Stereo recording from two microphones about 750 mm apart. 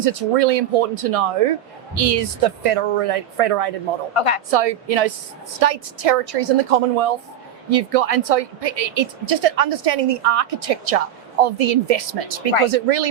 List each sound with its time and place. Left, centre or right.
0.0 s a woman's voice: right
4.1 s speech: left
4.5 s a woman's voice: right